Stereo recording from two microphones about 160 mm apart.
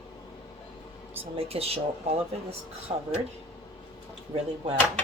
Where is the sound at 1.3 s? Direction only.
40° right (ahead or behind).